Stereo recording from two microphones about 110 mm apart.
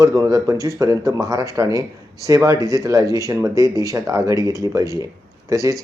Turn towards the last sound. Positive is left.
turn(degrees=-30)  # may be behind; listen again after turning